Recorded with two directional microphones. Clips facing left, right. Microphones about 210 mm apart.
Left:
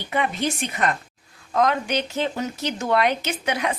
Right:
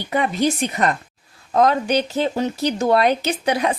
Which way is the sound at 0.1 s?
40° right (ahead or behind).